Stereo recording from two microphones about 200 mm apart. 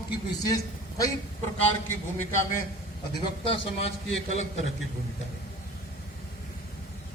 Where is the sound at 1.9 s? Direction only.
10° left (ahead or behind).